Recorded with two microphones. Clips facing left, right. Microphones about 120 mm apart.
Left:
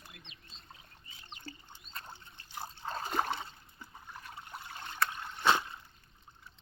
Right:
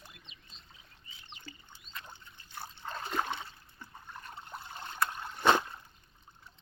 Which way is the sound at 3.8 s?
5° left (ahead or behind).